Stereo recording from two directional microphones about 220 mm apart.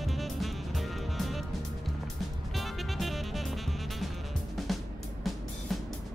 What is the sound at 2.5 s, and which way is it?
Music, centre (ahead or behind).